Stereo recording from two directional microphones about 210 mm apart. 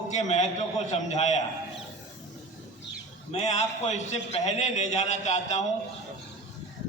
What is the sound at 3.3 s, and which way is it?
A man's voice, 35° left (ahead or behind).